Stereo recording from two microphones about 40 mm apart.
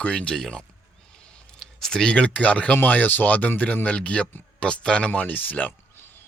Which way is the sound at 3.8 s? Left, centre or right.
Left.